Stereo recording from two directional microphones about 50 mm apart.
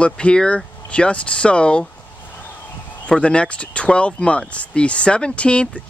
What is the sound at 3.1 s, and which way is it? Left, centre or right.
Speech, left.